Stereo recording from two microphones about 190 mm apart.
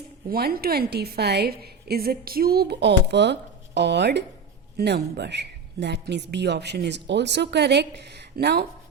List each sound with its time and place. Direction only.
0.3 s a woman's voice: 50° right (ahead or behind)